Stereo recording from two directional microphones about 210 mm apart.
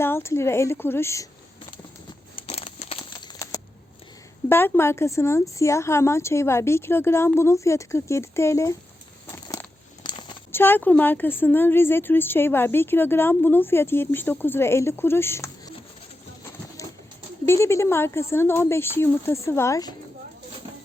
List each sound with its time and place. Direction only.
0.0 s a woman's voice: 10° left (ahead or behind)
2.3 s crumpling: 25° left (ahead or behind)
4.4 s a woman's voice: 10° left (ahead or behind)
9.3 s a sound: 15° left (ahead or behind)
10.6 s a woman's voice: 10° left (ahead or behind)
17.4 s a woman's voice: 10° left (ahead or behind)